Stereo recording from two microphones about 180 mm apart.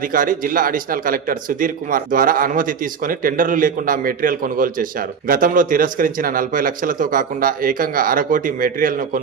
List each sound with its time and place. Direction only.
0.1 s a man's voice: 50° right (ahead or behind)